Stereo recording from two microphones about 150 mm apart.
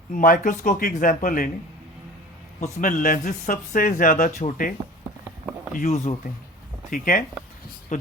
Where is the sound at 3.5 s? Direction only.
70° left (ahead or behind).